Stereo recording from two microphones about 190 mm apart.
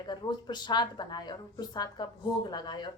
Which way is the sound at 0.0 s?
25° left (ahead or behind).